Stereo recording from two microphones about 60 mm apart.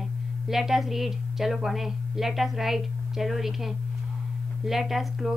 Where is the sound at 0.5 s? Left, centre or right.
Centre.